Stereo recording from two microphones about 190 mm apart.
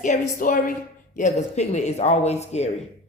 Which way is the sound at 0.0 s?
45° left (ahead or behind).